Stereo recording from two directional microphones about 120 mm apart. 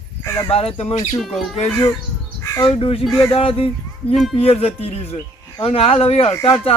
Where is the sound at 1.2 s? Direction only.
Centre (ahead or behind).